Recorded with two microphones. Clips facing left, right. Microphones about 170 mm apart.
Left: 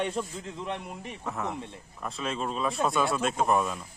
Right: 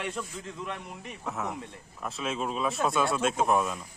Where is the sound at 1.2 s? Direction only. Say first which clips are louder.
Left 1 dB; centre (ahead or behind).